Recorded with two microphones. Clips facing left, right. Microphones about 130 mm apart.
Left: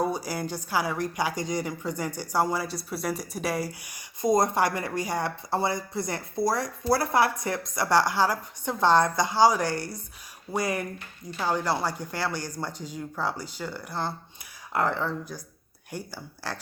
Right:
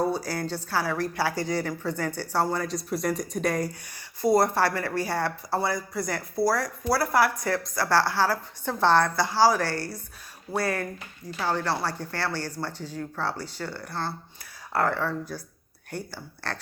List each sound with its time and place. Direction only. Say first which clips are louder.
0.0 s a woman's voice: right 1 dB; 10° left (ahead or behind)